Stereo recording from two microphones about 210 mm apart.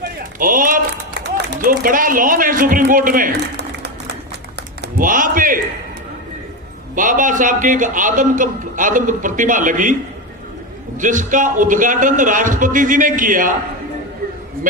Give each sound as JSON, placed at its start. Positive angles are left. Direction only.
{"t": 0.3, "sound": "speech", "side_deg": -40}
{"t": 1.2, "sound": "a man's voice", "side_deg": -50}
{"t": 4.8, "sound": "a man's voice", "side_deg": -40}
{"t": 6.9, "sound": "a man's voice", "side_deg": -40}
{"t": 10.9, "sound": "a man's voice", "side_deg": -40}